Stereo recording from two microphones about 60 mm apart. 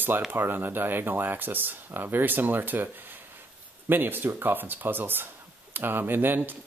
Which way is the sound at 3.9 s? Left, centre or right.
Right.